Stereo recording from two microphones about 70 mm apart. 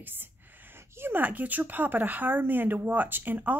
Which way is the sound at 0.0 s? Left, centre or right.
Right.